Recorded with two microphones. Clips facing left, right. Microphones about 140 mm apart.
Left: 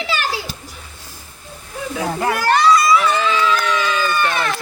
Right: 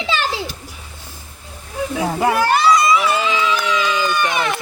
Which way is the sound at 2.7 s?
20° right (ahead or behind).